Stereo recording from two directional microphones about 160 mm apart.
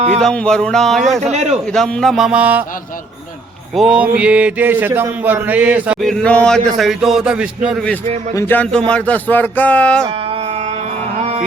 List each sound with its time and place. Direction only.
0.2 s speech: 5° left (ahead or behind)
1.2 s a man's voice: 45° right (ahead or behind)
1.7 s speech: 5° left (ahead or behind)
3.8 s a sound: 5° right (ahead or behind)
6.0 s speech: 5° left (ahead or behind)
8.4 s speech: 10° left (ahead or behind)